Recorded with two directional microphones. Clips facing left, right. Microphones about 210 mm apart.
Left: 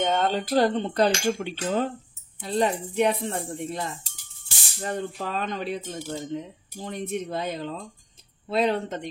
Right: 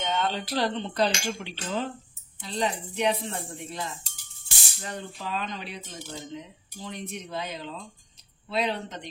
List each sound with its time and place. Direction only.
0.0 s speech: 45° left (ahead or behind)
4.8 s speech: 50° left (ahead or behind)